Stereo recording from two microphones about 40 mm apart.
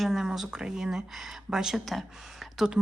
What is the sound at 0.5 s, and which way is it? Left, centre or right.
Speech, centre.